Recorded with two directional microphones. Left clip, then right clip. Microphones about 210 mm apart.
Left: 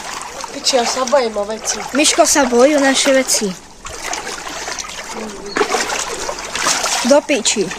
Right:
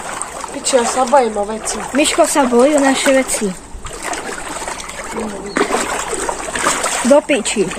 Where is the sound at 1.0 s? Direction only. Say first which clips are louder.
Right 4 dB; 5° left (ahead or behind).